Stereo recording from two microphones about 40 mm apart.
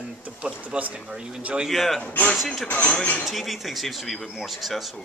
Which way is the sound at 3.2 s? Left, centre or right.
Centre.